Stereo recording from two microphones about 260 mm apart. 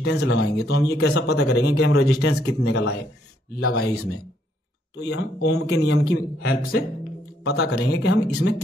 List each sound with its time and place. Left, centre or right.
0.0 s speech: left